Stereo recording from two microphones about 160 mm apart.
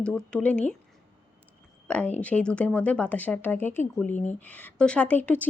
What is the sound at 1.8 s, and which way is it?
Speech, 10° left (ahead or behind).